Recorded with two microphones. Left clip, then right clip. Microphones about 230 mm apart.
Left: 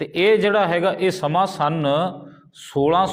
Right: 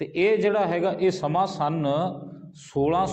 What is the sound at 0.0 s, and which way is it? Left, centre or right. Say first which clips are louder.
A man's voice: left 5 dB; left.